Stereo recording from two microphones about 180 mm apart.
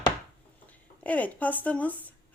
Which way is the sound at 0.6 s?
10° left (ahead or behind).